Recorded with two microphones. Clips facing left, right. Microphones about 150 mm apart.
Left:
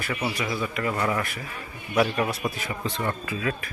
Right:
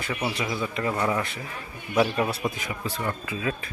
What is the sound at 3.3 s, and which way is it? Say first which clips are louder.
Speech: left 1 dB; 20° right (ahead or behind).